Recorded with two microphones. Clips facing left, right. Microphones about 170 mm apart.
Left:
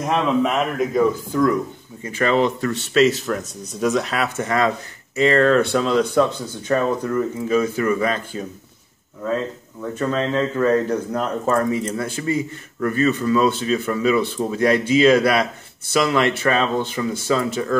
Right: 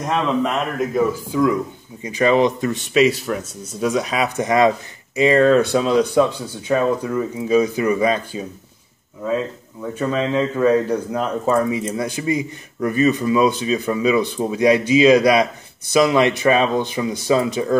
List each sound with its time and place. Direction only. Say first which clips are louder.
0.0 s speech: left 1 dB; centre (ahead or behind); by 8.2 s 15° right (ahead or behind)
9.2 s speech: right 1 dB; 10° right (ahead or behind)